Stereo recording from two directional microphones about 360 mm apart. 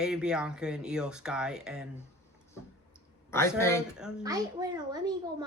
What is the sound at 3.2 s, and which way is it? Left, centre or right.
A woman's voice, centre.